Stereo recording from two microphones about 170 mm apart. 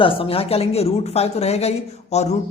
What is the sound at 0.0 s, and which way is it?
A woman's voice, 30° left (ahead or behind).